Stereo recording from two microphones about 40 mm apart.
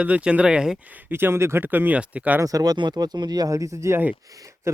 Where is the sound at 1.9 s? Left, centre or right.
Right.